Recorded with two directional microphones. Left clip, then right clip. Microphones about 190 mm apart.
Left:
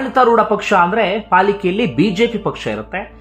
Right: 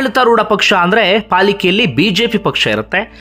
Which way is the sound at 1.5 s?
20° right (ahead or behind).